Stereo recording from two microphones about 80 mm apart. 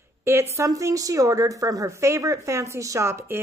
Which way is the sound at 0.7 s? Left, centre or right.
Right.